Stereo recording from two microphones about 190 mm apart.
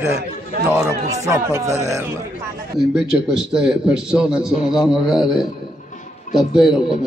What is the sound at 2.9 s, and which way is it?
A man's voice, 5° right (ahead or behind).